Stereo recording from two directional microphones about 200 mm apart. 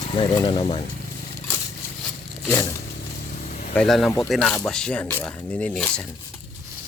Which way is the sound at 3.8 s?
Centre (ahead or behind).